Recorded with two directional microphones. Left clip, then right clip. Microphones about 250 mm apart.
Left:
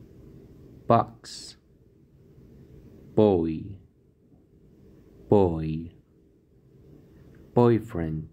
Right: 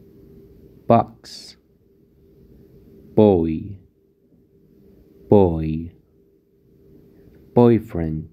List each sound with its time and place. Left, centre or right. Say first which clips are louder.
0.8 s a sound: right 5 dB; centre
3.2 s speech: right 6 dB; centre
5.3 s speech: right 6 dB; centre
7.5 s speech: right 6 dB; centre